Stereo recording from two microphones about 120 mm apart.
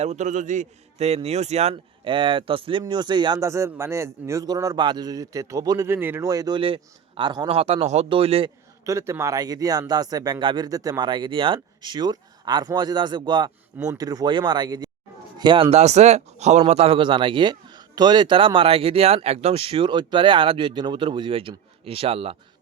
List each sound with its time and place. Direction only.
0.0 s a man's voice: 70° right (ahead or behind)
1.7 s speech: 45° right (ahead or behind)
3.4 s speech: 25° right (ahead or behind)
5.9 s speech: 20° right (ahead or behind)
6.2 s speech: 30° right (ahead or behind)
7.5 s speech: 55° right (ahead or behind)
8.8 s speech: 25° right (ahead or behind); by 15.8 s 45° right (ahead or behind)
15.8 s speech: 70° right (ahead or behind); by 22.4 s 55° right (ahead or behind)